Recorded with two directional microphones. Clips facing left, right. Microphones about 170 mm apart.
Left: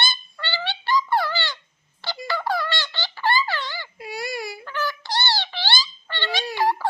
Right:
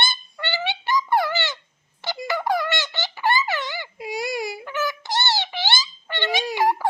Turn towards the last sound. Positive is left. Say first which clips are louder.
# right 2 dB
turn(degrees=-15)  # may be behind; listen again after turning